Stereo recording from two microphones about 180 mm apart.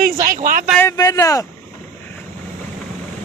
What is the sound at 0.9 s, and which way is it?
Speech, 20° left (ahead or behind).